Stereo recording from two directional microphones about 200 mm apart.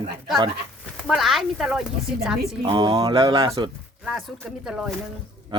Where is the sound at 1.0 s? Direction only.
Centre (ahead or behind).